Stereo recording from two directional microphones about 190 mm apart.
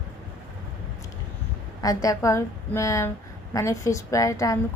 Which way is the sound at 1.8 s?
20° left (ahead or behind).